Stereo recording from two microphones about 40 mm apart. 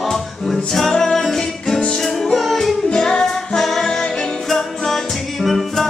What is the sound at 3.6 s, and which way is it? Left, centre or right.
Music, centre.